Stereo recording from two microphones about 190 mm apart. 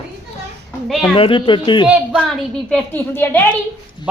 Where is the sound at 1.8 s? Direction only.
Centre (ahead or behind).